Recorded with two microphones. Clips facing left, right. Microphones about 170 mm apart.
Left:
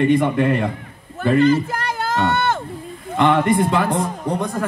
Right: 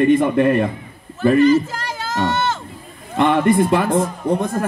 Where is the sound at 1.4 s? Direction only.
55° left (ahead or behind).